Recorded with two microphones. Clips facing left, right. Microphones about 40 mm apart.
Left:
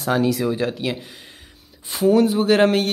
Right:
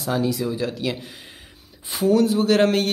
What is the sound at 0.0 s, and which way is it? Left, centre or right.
Speech, left.